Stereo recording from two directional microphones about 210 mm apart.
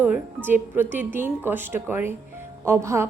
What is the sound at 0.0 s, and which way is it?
Speech, 10° right (ahead or behind).